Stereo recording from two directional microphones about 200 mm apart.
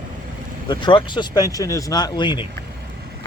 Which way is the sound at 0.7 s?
25° left (ahead or behind).